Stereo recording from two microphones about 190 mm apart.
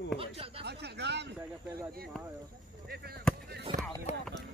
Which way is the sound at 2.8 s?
55° right (ahead or behind).